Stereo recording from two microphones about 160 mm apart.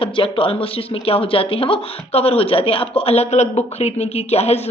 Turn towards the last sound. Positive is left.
turn(degrees=40)  # may be behind; listen again after turning